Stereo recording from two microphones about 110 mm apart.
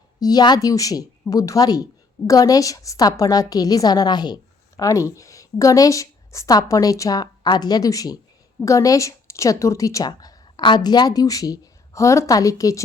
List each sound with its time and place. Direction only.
0.2 s speech: 35° left (ahead or behind)